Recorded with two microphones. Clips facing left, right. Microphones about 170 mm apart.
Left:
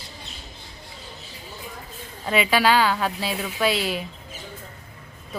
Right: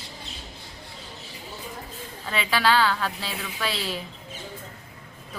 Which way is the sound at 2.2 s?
15° left (ahead or behind).